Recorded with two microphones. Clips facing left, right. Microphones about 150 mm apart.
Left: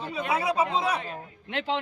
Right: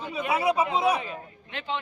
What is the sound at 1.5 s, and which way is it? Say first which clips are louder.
Speech: left 4 dB; 90° left.